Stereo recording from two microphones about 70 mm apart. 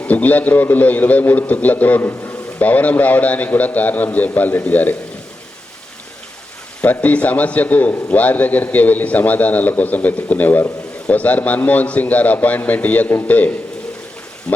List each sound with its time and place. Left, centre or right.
0.0 s a man's voice: left
6.8 s a man's voice: left